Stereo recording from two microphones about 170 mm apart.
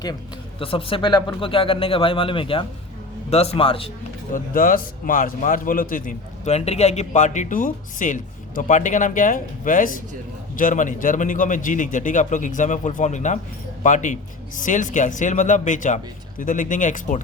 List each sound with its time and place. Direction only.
0.6 s speech: 30° left (ahead or behind)
4.4 s a man's voice: 55° left (ahead or behind)